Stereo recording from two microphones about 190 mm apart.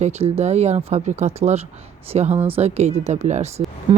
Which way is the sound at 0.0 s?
35° right (ahead or behind).